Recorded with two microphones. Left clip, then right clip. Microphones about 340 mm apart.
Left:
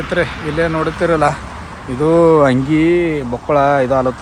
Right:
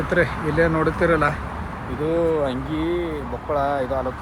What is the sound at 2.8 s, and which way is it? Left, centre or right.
Speech, left.